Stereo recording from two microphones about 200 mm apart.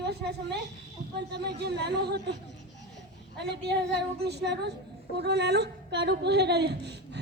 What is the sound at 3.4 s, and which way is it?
A woman's voice, 55° right (ahead or behind).